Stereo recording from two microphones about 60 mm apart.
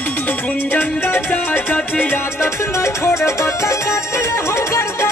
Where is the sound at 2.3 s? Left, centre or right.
Left.